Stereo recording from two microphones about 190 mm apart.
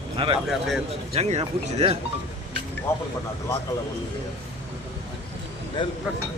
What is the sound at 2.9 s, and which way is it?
Speech, 15° left (ahead or behind).